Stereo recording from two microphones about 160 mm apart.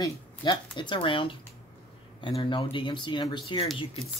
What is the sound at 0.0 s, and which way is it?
Speech, 30° left (ahead or behind).